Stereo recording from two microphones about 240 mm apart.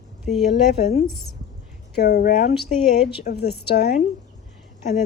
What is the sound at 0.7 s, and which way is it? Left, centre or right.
A woman's voice, left.